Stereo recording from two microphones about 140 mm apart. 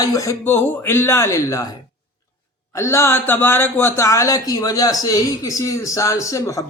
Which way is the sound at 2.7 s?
20° left (ahead or behind).